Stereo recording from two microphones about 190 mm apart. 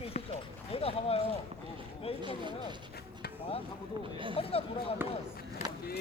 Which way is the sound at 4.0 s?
25° right (ahead or behind).